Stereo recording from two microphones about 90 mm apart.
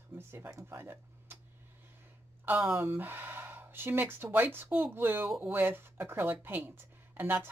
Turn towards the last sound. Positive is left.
turn(degrees=-20)  # may be behind; listen again after turning